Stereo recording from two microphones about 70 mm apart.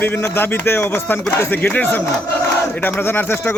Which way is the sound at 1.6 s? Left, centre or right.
Left.